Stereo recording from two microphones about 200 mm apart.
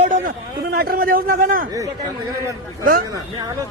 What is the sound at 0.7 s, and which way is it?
Speech, 50° right (ahead or behind).